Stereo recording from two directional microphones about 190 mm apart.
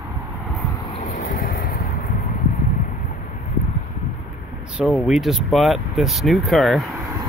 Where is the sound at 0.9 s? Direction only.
40° left (ahead or behind).